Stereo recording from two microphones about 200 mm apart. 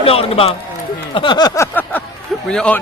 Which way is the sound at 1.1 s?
20° left (ahead or behind).